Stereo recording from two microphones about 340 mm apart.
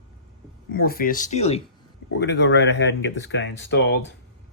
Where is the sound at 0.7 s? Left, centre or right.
Left.